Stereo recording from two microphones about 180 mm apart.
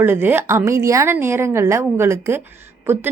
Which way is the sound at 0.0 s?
10° right (ahead or behind).